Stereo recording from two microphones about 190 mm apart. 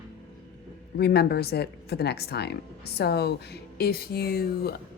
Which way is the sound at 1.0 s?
60° left (ahead or behind).